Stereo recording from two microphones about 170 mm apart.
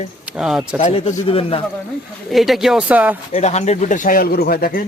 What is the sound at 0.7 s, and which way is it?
Speech, 40° left (ahead or behind).